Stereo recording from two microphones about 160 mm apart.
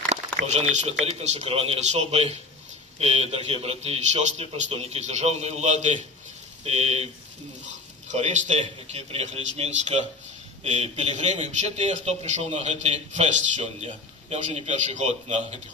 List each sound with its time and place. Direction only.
0.4 s a man's voice: 45° right (ahead or behind)
8.1 s speech: 45° right (ahead or behind)